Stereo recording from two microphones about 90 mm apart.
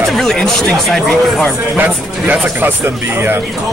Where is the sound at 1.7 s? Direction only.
20° right (ahead or behind).